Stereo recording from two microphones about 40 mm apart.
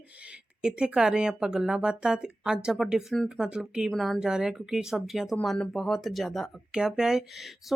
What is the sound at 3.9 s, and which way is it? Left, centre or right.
Speech, centre.